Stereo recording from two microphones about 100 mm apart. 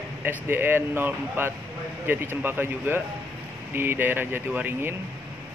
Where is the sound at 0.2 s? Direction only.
20° right (ahead or behind).